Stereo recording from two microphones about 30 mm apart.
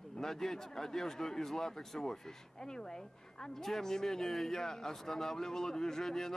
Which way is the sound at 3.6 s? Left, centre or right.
Centre.